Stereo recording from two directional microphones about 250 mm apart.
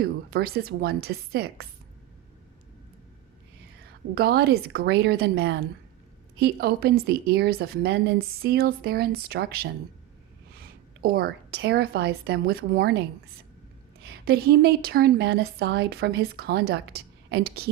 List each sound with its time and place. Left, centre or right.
0.0 s a woman's voice: right
4.1 s a woman's voice: right
14.0 s a woman's voice: right